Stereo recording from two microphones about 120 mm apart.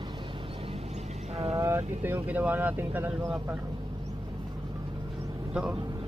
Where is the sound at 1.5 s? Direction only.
20° right (ahead or behind).